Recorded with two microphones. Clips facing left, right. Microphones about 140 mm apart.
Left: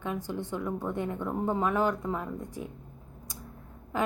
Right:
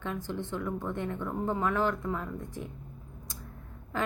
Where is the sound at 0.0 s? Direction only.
15° left (ahead or behind).